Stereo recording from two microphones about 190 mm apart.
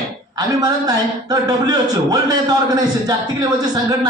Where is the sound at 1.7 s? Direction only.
20° right (ahead or behind).